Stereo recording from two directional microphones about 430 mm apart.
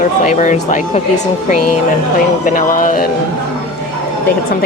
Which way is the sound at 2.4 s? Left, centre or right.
Centre.